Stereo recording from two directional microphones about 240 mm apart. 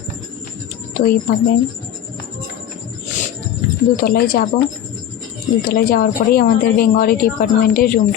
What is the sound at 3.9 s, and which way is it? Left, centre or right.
Speech, left.